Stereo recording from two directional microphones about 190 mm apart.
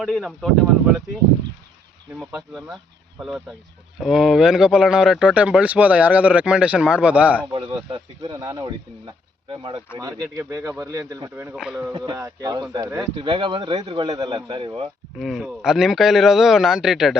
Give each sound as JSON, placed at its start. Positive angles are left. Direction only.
{"t": 0.0, "sound": "speech", "side_deg": 0}
{"t": 3.2, "sound": "speech", "side_deg": -5}
{"t": 7.7, "sound": "speech", "side_deg": -25}
{"t": 11.5, "sound": "speech", "side_deg": -5}
{"t": 11.9, "sound": "speech", "side_deg": -20}
{"t": 15.2, "sound": "speech", "side_deg": 0}